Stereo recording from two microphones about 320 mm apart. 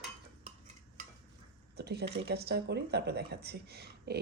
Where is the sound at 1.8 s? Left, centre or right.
Right.